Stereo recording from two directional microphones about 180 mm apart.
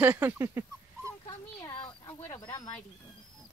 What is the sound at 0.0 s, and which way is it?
Dog, 10° right (ahead or behind).